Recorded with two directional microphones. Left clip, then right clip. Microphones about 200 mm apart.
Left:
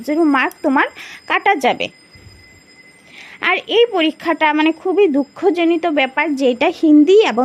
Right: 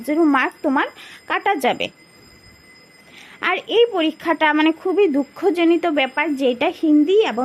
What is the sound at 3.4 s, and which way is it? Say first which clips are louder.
A woman's voice: left 3 dB; 5° left (ahead or behind).